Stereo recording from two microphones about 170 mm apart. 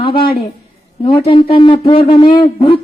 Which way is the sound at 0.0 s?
30° left (ahead or behind).